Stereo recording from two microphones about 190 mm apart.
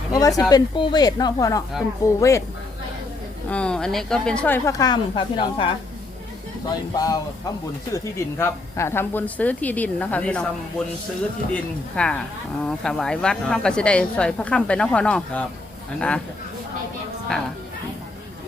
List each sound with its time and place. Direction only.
0.1 s a woman's voice: 20° left (ahead or behind)
3.5 s speech: 5° left (ahead or behind); by 5.6 s 25° left (ahead or behind)
6.7 s a woman's voice: 20° left (ahead or behind)
11.5 s a woman's voice: 5° left (ahead or behind)